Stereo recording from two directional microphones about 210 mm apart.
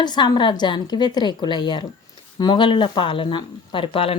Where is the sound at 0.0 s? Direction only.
20° left (ahead or behind).